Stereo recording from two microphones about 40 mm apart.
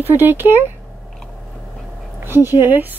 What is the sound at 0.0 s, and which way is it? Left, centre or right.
Speech, right.